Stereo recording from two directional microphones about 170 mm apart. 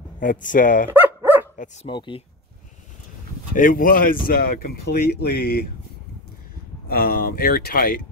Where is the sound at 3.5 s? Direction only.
55° left (ahead or behind).